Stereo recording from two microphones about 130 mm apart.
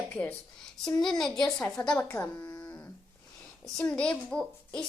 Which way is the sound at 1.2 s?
5° left (ahead or behind).